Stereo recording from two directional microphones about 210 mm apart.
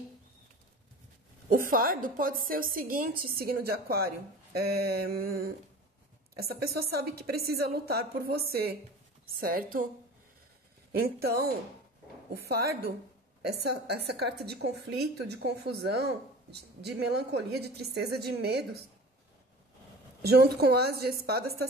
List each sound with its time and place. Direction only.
1.5 s a woman's voice: 45° right (ahead or behind)
10.9 s a woman's voice: 45° right (ahead or behind)
20.2 s a woman's voice: 50° right (ahead or behind)